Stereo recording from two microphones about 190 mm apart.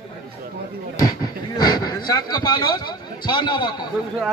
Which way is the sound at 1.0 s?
20° left (ahead or behind).